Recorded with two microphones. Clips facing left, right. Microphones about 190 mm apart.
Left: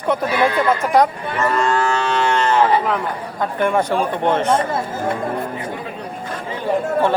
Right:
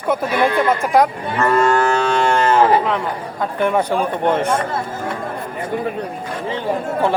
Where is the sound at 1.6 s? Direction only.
50° right (ahead or behind).